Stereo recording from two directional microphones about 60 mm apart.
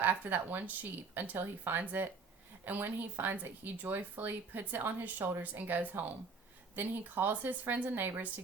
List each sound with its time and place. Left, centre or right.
0.0 s speech: right